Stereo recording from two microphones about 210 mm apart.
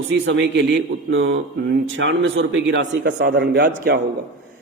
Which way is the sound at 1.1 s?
65° right (ahead or behind).